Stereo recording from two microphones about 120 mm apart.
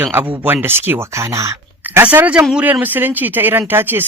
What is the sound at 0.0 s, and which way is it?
Speech, 15° right (ahead or behind).